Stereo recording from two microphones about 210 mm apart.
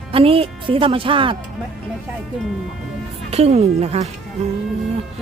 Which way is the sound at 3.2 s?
30° right (ahead or behind).